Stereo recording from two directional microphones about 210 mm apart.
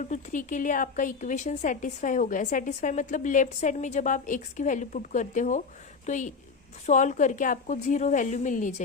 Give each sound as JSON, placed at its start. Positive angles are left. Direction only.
{"t": 0.0, "sound": "a woman's voice", "side_deg": 35}